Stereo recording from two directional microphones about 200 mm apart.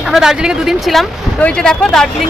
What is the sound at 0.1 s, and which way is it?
Speech, 5° right (ahead or behind).